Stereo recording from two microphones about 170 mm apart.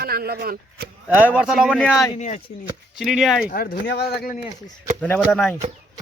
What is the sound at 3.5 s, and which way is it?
Speech, 60° left (ahead or behind).